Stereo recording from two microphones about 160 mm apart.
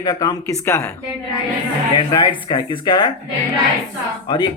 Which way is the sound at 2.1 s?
25° left (ahead or behind).